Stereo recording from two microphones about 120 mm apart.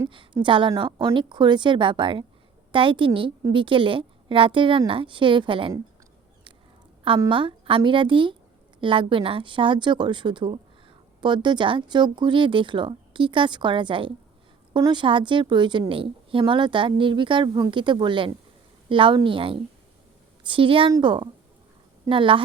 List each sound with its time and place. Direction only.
0.4 s speech: 45° right (ahead or behind)
7.3 s speech: 45° right (ahead or behind)